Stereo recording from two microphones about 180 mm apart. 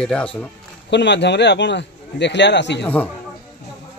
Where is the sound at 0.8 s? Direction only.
75° left (ahead or behind).